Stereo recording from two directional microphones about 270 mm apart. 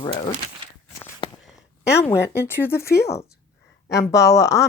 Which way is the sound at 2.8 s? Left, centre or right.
Left.